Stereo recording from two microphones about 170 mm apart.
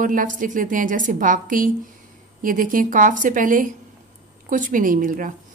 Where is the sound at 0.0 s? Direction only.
50° right (ahead or behind).